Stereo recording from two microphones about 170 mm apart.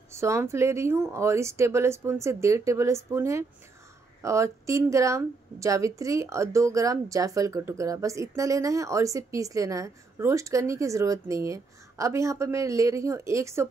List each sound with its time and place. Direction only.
0.1 s a woman's voice: 15° right (ahead or behind)